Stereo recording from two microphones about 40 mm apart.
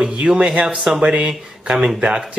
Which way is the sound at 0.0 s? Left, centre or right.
Right.